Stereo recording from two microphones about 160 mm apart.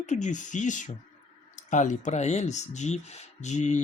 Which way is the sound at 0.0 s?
50° left (ahead or behind).